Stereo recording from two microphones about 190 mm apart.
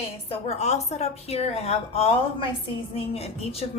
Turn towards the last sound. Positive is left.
turn(degrees=30)  # may be behind; listen again after turning